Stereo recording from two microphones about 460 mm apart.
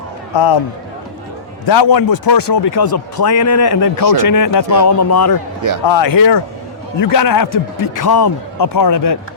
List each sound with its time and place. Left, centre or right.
0.3 s speech: left
1.6 s a man's voice: left
3.3 s speech: left
5.8 s speech: left
7.0 s a man's voice: left